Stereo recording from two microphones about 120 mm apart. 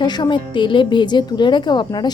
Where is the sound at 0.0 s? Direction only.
40° left (ahead or behind).